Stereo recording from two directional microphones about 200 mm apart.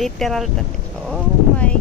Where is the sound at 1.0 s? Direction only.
5° left (ahead or behind).